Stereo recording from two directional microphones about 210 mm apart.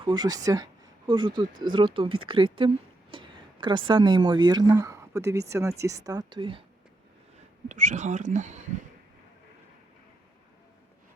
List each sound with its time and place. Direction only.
0.0 s speech: 20° right (ahead or behind)
7.3 s speech: 35° right (ahead or behind)